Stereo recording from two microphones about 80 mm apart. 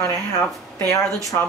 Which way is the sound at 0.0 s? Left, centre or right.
Left.